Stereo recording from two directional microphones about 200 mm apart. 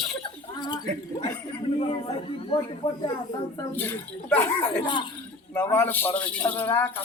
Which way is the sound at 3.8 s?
10° left (ahead or behind).